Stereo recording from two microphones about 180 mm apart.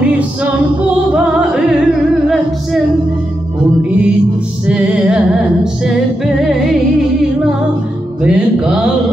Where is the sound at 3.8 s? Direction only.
5° right (ahead or behind).